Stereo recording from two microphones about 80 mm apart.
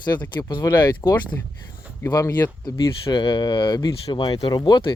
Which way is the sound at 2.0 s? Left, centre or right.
Left.